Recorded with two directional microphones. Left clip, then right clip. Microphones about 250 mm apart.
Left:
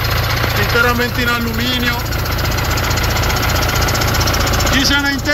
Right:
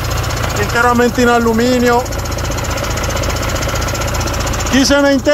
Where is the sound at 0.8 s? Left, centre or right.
Right.